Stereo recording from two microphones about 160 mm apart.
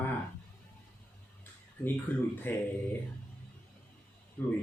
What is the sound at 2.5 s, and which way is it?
Speech, 10° left (ahead or behind).